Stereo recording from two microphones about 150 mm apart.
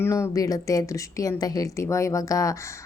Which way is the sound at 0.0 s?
20° left (ahead or behind).